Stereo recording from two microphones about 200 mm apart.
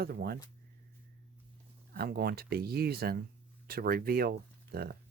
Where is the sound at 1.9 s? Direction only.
50° right (ahead or behind).